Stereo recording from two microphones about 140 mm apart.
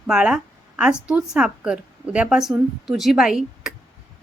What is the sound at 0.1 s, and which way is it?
A woman's voice, 5° right (ahead or behind).